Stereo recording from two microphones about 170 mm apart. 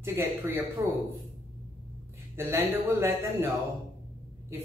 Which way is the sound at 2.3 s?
15° right (ahead or behind).